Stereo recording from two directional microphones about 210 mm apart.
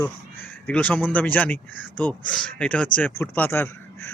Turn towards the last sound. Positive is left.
turn(degrees=10)  # may be behind; listen again after turning